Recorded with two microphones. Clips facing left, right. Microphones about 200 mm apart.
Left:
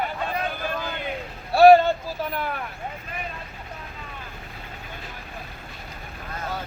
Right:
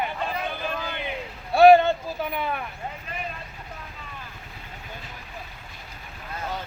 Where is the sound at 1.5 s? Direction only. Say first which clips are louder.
Left 1 dB; centre (ahead or behind).